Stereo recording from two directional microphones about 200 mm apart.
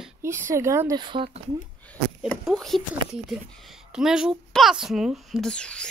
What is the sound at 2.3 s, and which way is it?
Speech, centre (ahead or behind).